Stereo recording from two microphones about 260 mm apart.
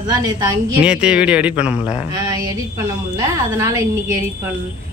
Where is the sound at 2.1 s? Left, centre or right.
Centre.